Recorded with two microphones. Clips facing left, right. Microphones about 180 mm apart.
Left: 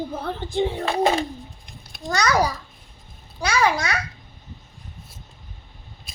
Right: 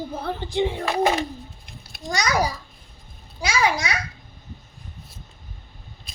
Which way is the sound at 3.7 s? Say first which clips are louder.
Left 1 dB; 10° right (ahead or behind).